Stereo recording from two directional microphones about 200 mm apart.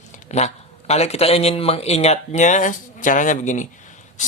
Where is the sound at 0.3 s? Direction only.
35° left (ahead or behind).